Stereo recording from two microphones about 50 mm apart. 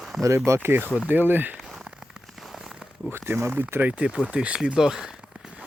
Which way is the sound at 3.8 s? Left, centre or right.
Right.